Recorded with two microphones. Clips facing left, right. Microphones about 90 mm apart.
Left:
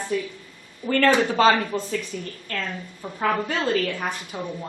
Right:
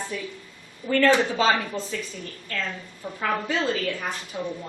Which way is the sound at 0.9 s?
50° left (ahead or behind).